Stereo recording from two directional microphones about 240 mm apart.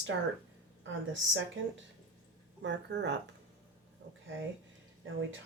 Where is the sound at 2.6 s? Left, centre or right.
Right.